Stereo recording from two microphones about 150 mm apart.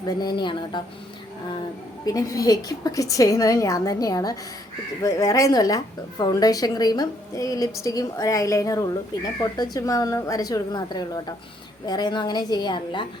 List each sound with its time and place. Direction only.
0.2 s a woman's voice: 30° left (ahead or behind)
2.0 s a woman's voice: 25° left (ahead or behind)